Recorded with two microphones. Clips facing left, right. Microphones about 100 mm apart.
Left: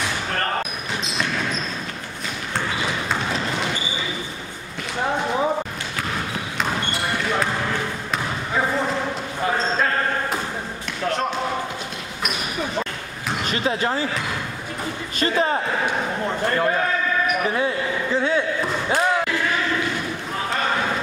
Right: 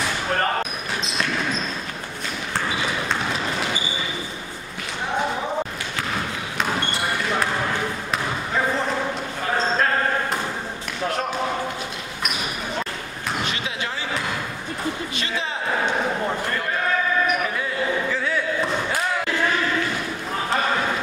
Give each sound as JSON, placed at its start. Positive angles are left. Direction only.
{"t": 13.5, "sound": "basketball bounce", "side_deg": 40}
{"t": 15.1, "sound": "a sound", "side_deg": 45}
{"t": 18.1, "sound": "slam", "side_deg": 25}